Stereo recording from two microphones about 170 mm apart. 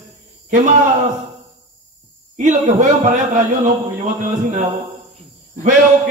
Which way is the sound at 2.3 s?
45° right (ahead or behind).